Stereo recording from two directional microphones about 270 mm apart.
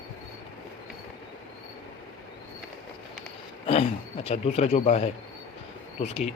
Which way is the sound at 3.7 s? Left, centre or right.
Left.